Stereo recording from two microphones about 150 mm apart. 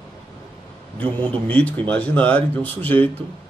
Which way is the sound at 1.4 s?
10° left (ahead or behind).